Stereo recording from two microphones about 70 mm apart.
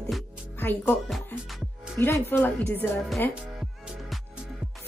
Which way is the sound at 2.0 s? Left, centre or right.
Left.